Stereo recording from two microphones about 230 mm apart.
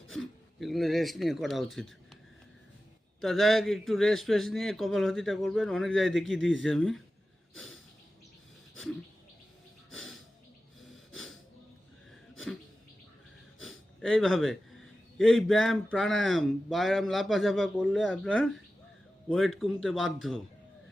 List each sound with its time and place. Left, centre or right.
0.1 s speech: centre
3.2 s speech: centre
7.5 s snort: centre
8.7 s a sound: centre
9.9 s snort: centre
13.6 s wheeze: centre
15.2 s speech: centre